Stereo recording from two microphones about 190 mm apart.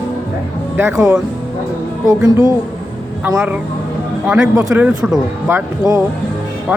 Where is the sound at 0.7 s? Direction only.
15° right (ahead or behind).